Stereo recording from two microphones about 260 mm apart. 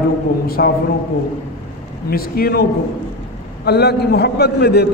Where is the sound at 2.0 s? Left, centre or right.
Left.